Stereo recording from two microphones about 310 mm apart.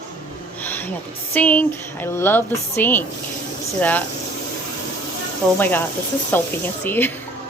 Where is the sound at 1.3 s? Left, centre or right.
Centre.